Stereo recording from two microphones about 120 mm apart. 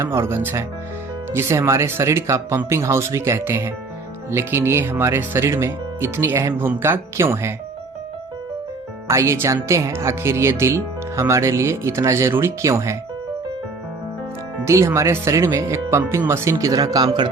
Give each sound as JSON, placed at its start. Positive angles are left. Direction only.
{"t": 0.0, "sound": "speech", "side_deg": -20}
{"t": 9.0, "sound": "speech", "side_deg": -25}
{"t": 14.6, "sound": "speech", "side_deg": -25}